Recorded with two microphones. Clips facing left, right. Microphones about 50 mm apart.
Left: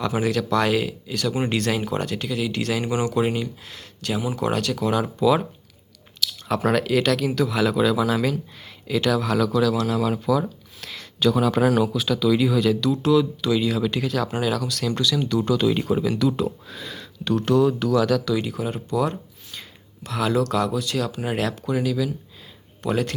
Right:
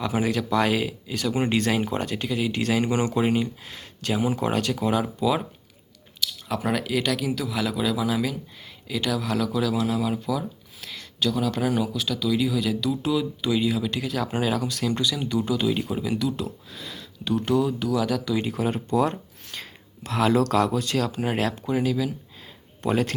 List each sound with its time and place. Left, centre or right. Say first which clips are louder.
0.0 s speech: left 2 dB; centre
6.1 s speech: left 4 dB; centre
9.5 s speech: left 3 dB; centre
14.3 s speech: left 1 dB; centre
15.1 s speech: left 4 dB; centre
18.5 s speech: right 1 dB; right
21.2 s speech: left 1 dB; right